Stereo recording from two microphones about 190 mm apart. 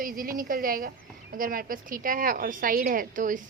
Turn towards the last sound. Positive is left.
turn(degrees=-45)  # may be behind; listen again after turning